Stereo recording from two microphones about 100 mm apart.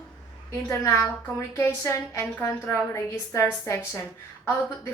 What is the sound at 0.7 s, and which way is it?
A woman's voice, 30° left (ahead or behind).